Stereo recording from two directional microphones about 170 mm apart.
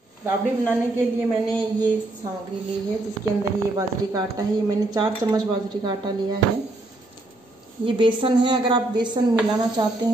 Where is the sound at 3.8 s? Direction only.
20° right (ahead or behind).